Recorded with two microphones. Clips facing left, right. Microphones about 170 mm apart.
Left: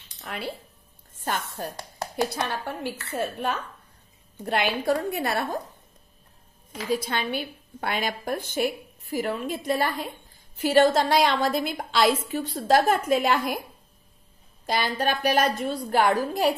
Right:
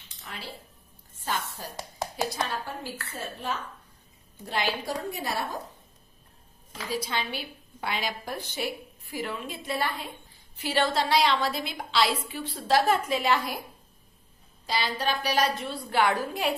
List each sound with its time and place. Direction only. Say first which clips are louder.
0.2 s a sound: left 7 dB; 60° left (ahead or behind)
1.2 s a woman's voice: left 3 dB; 60° left (ahead or behind)
6.9 s a woman's voice: left 5 dB; 50° left (ahead or behind)
14.7 s a woman's voice: left 3 dB; 50° left (ahead or behind)